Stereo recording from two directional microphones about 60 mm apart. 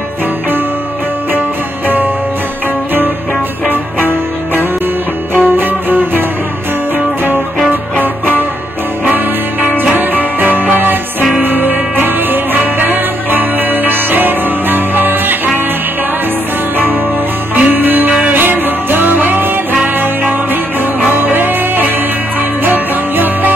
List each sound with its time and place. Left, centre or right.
5.3 s music: right
16.7 s music: right
21.1 s music: right